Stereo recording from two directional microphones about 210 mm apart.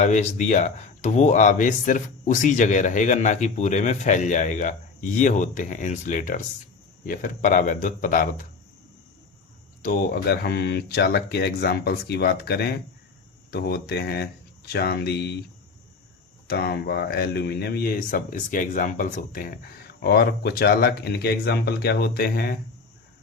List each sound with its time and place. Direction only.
0.0 s speech: 35° left (ahead or behind)
9.8 s speech: 45° left (ahead or behind)
16.5 s speech: 50° left (ahead or behind)